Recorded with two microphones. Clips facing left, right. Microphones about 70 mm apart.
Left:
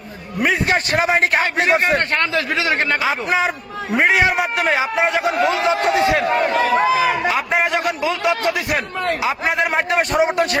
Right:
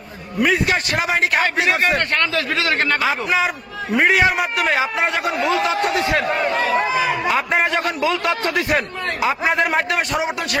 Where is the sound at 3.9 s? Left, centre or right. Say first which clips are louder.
Even; centre.